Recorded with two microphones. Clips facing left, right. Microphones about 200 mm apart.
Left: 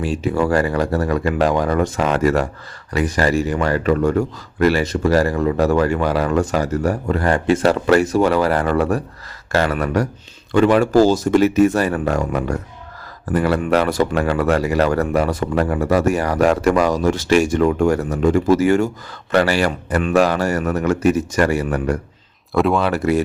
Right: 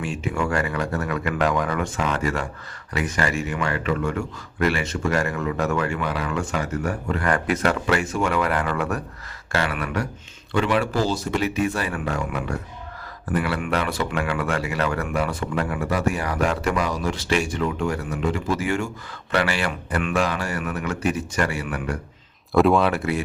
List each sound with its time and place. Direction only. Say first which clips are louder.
0.0 s speech: left 7 dB; 35° left (ahead or behind)
22.5 s speech: even; centre (ahead or behind)
23.0 s speech: left 8 dB; 40° left (ahead or behind)